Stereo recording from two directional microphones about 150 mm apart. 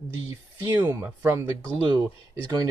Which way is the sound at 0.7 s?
15° right (ahead or behind).